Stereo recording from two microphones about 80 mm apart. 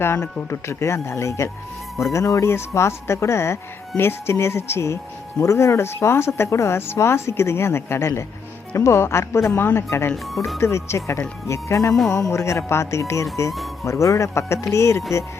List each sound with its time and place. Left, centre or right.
0.0 s speech: left
10.3 s speech: centre
10.6 s speech: left